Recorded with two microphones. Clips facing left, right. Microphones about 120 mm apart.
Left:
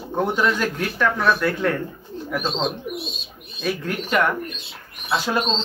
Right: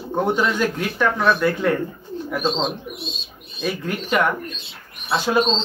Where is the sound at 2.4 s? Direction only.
25° right (ahead or behind).